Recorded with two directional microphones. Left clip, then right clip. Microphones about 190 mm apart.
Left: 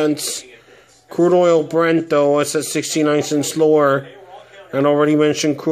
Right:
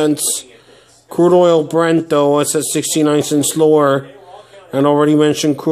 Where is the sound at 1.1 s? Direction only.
10° right (ahead or behind).